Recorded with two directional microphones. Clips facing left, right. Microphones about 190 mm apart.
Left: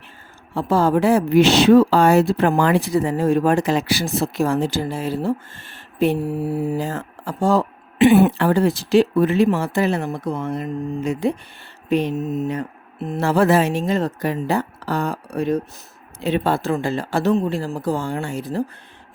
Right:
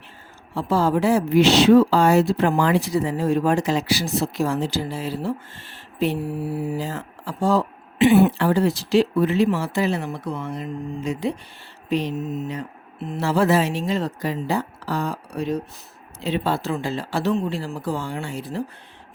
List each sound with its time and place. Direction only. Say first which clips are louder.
0.5 s a woman's voice: left 3 dB; 55° left (ahead or behind)